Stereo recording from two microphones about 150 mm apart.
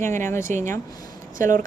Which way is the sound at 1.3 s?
60° right (ahead or behind).